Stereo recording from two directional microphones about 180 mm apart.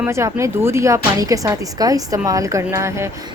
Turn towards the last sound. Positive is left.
turn(degrees=-15)  # may be behind; listen again after turning